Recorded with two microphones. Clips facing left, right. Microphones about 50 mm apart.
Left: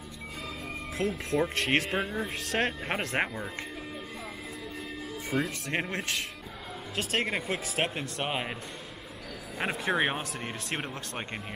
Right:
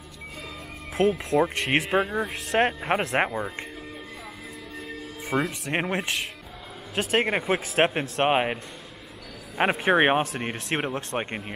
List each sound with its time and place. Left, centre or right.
1.1 s speech: centre
5.3 s speech: right
9.6 s speech: right